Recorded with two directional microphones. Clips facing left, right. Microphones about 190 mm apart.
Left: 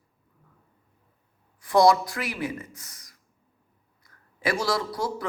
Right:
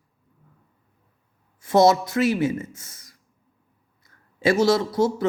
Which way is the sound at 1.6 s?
25° right (ahead or behind).